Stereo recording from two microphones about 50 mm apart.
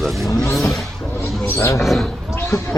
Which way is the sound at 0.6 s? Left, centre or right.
Centre.